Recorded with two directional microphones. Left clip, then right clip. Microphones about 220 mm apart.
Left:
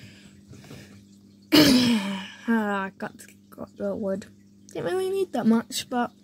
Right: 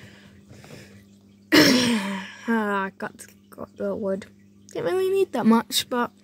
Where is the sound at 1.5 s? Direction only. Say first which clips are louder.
Right 1 dB; 5° right (ahead or behind).